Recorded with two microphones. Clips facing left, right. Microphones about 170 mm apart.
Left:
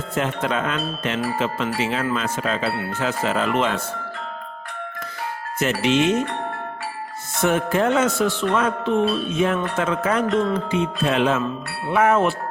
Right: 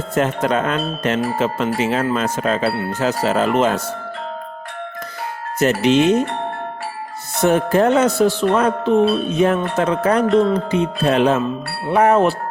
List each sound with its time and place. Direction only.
0.1 s speech: 40° right (ahead or behind)
2.1 s music: 40° right (ahead or behind)
5.5 s music: 40° right (ahead or behind)
7.3 s music: 35° right (ahead or behind)